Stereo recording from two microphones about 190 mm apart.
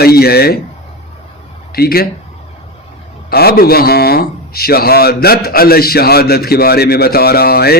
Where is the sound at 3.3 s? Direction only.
55° left (ahead or behind).